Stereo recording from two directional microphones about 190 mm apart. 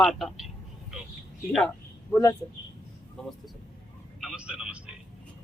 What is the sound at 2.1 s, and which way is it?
Speech, 15° left (ahead or behind).